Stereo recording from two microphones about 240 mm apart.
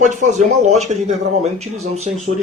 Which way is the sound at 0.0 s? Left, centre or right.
Right.